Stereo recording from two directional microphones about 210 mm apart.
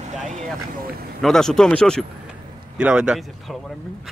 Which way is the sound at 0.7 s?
45° right (ahead or behind).